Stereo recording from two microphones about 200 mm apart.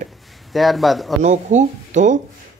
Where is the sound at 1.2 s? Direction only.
35° right (ahead or behind).